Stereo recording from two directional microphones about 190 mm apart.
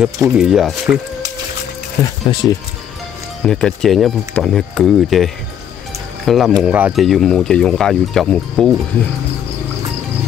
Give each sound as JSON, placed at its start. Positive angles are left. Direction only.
{"t": 0.0, "sound": "speech", "side_deg": -5}
{"t": 2.3, "sound": "speech", "side_deg": 25}
{"t": 3.4, "sound": "speech", "side_deg": 0}